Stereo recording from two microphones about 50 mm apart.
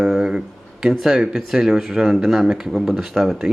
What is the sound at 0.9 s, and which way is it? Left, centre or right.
Speech, centre.